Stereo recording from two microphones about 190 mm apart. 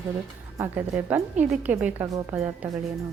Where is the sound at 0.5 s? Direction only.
10° right (ahead or behind).